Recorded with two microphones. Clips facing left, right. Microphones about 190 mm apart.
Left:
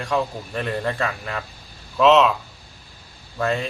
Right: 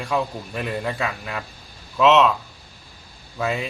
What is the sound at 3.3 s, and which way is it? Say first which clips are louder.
Speech: left 2 dB; 5° right (ahead or behind).